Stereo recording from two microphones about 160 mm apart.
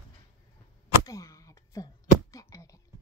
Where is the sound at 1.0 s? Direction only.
20° left (ahead or behind).